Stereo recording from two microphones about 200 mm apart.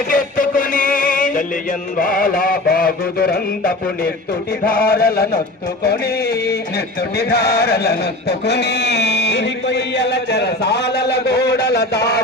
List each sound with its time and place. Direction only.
0.1 s music: 45° left (ahead or behind)
2.0 s mantra: 45° left (ahead or behind)
5.8 s music: 50° left (ahead or behind)